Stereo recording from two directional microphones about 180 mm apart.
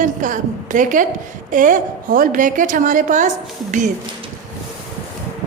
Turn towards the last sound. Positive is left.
turn(degrees=-45)  # may be behind; listen again after turning